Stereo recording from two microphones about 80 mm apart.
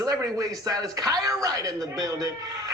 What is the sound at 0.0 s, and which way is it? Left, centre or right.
Speech, right.